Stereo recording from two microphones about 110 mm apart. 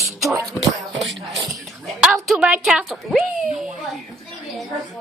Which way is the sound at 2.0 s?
5° right (ahead or behind).